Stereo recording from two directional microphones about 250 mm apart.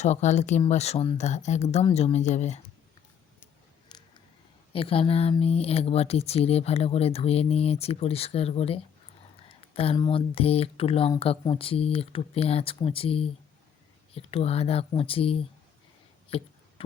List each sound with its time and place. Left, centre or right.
0.0 s speech: left
3.4 s a sound: centre
4.7 s speech: left